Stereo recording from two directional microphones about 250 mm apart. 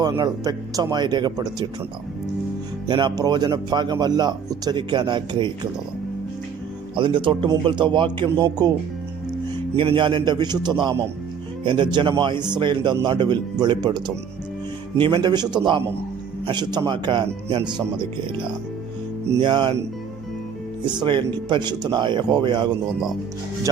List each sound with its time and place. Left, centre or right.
0.0 s speech: centre
2.8 s speech: centre
6.9 s a man's voice: centre
9.7 s a man's voice: right
21.0 s speech: centre
22.9 s speech: centre